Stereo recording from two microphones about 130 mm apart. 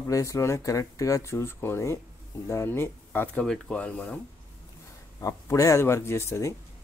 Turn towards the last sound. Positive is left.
turn(degrees=20)  # may be behind; listen again after turning